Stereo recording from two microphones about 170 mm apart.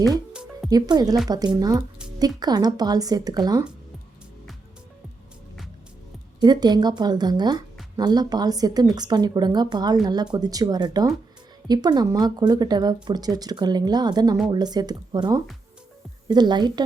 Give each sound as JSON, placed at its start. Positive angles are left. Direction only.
{"t": 0.7, "sound": "speech", "side_deg": -25}
{"t": 6.4, "sound": "speech", "side_deg": -25}